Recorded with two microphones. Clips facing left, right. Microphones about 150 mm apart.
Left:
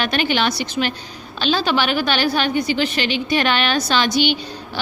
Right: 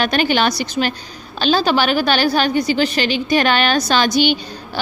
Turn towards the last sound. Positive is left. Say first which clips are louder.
# right 3 dB
turn(degrees=-45)  # may be behind; listen again after turning